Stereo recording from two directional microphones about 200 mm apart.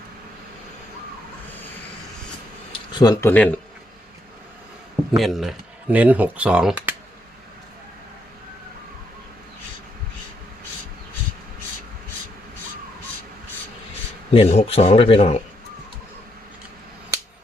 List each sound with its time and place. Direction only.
2.7 s speech: 20° left (ahead or behind)
5.1 s speech: centre (ahead or behind)
14.3 s speech: 30° left (ahead or behind)